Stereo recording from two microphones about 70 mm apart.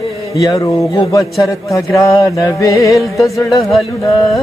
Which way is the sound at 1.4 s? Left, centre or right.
Left.